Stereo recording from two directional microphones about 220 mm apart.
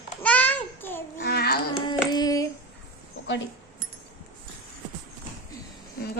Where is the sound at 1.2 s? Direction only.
45° left (ahead or behind).